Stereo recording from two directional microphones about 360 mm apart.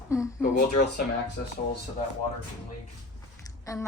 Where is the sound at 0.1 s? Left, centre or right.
Centre.